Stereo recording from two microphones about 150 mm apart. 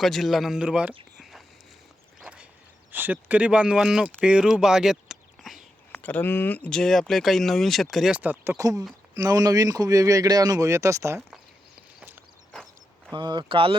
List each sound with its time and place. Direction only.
0.0 s speech: centre (ahead or behind)
1.2 s a sound: centre (ahead or behind)
2.2 s whip: 5° right (ahead or behind)
2.9 s speech: 10° right (ahead or behind)
5.9 s a man's voice: 10° left (ahead or behind); by 11.2 s 20° right (ahead or behind)
11.9 s a sound: 15° right (ahead or behind)
13.1 s speech: 30° right (ahead or behind)